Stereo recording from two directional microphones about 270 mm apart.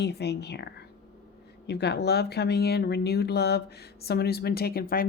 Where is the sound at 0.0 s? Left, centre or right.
Left.